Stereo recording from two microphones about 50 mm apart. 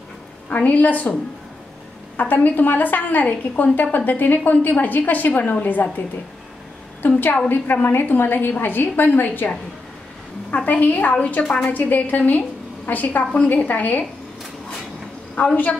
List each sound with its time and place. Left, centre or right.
0.5 s a woman's voice: left
2.1 s a woman's voice: left
7.0 s a woman's voice: left
10.5 s a woman's voice: left
11.7 s a woman's voice: left
15.3 s a woman's voice: left